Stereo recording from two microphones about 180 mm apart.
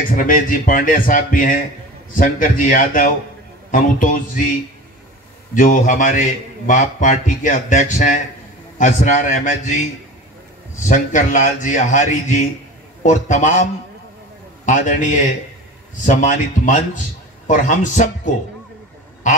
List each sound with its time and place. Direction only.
0.1 s a man's voice: 50° left (ahead or behind)
5.5 s a man's voice: 45° left (ahead or behind)
10.9 s a man's voice: 40° left (ahead or behind)
14.7 s a man's voice: 45° left (ahead or behind)